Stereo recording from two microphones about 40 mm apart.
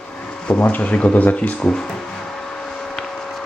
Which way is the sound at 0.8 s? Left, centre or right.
Left.